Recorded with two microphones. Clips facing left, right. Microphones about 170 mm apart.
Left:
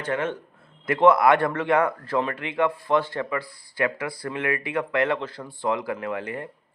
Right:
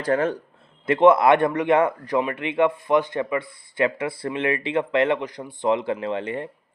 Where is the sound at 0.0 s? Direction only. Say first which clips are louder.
Right 5 dB; 35° right (ahead or behind).